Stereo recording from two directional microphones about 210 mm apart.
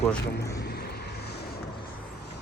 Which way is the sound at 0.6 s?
50° left (ahead or behind).